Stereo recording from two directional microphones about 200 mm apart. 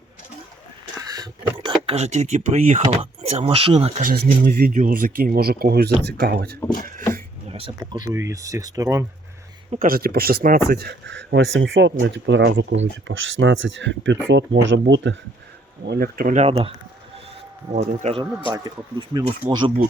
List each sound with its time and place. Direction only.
0.9 s a sound: 20° right (ahead or behind); by 2.8 s 35° right (ahead or behind)
2.9 s speech: 30° right (ahead or behind)
4.0 s speech: 45° right (ahead or behind)
7.4 s speech: 30° right (ahead or behind)
8.1 s speech: 15° right (ahead or behind)
9.7 s speech: 45° right (ahead or behind); by 15.1 s 65° right (ahead or behind)
15.9 s speech: 45° right (ahead or behind); by 19.7 s 20° right (ahead or behind)